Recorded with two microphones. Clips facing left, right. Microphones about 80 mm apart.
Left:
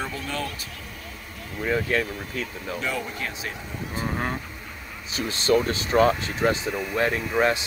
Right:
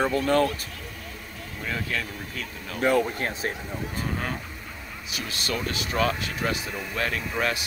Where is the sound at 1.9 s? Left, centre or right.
Left.